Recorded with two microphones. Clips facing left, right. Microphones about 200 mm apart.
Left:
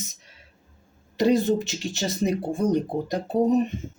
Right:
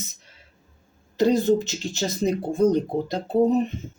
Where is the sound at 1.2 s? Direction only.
15° left (ahead or behind).